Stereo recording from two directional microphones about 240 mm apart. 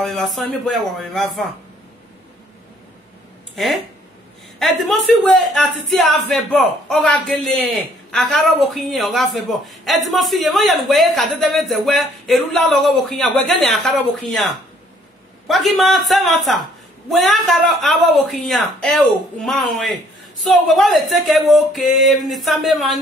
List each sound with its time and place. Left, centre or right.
0.0 s a man's voice: centre
3.5 s a man's voice: centre
15.4 s a man's voice: centre